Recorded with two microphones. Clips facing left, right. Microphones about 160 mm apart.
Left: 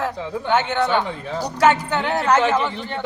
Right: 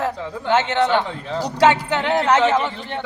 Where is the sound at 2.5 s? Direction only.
15° right (ahead or behind).